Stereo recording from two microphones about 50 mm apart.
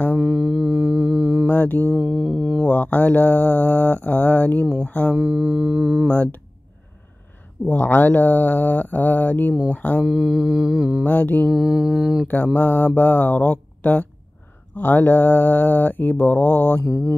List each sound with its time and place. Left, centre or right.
0.4 s music: centre
1.5 s mantra: left
2.0 s mantra: centre
2.6 s mantra: left
5.1 s mantra: right
6.0 s mantra: left
7.7 s mantra: left
9.7 s speech: left
10.0 s mantra: centre
11.1 s mantra: left
11.5 s mantra: centre
12.5 s mantra: left
16.9 s speech: left